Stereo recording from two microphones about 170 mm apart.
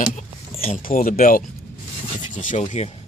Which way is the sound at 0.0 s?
40° left (ahead or behind).